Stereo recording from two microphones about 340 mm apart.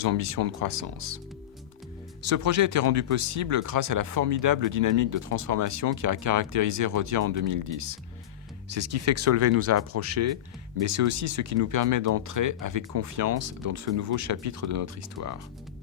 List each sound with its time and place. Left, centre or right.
0.0 s speech: right
2.2 s speech: right